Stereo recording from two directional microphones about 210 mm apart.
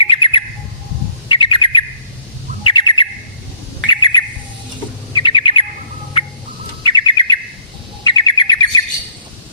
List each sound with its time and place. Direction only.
0.0 s bird: 25° left (ahead or behind)
6.8 s bird: 20° left (ahead or behind)